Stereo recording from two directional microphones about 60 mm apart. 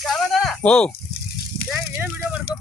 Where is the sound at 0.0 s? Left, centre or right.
Centre.